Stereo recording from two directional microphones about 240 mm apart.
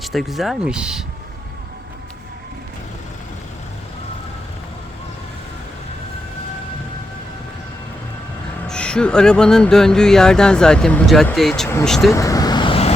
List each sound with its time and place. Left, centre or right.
0.0 s speech: centre
8.6 s speech: centre
12.1 s vehicle: centre